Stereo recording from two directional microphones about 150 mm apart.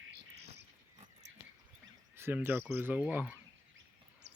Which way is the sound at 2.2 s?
15° right (ahead or behind).